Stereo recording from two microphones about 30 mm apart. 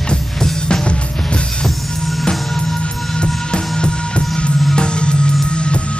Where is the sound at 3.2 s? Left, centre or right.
Left.